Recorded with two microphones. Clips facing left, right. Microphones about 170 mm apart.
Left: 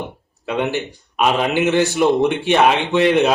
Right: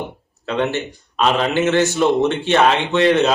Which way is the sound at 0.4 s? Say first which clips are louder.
Even; 10° left (ahead or behind).